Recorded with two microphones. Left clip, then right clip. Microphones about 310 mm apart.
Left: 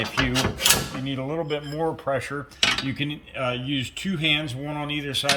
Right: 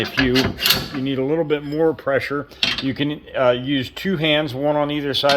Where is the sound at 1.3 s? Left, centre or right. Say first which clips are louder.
Right 7 dB; centre.